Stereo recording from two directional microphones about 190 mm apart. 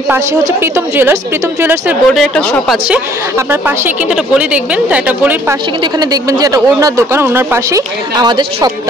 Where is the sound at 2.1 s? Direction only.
5° left (ahead or behind).